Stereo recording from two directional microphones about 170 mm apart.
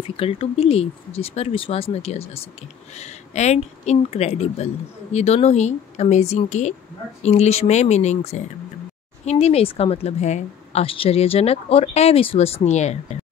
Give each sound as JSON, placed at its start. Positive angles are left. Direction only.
{"t": 0.2, "sound": "a woman's voice", "side_deg": 35}